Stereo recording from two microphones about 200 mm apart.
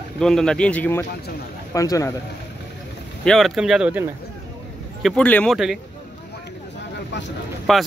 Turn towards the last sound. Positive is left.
turn(degrees=0)  # may be behind; listen again after turning